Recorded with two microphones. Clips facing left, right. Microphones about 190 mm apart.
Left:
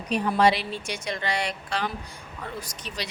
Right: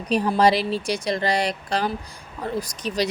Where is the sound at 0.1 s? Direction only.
35° right (ahead or behind).